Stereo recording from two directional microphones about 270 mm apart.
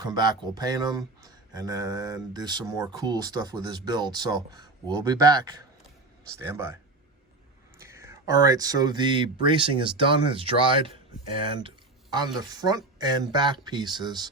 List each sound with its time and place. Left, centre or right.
0.0 s speech: centre
6.4 s speech: centre
7.8 s speech: centre
12.1 s speech: centre